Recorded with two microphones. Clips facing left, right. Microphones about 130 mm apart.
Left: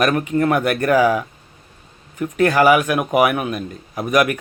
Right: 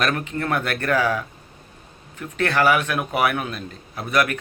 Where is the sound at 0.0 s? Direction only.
10° left (ahead or behind).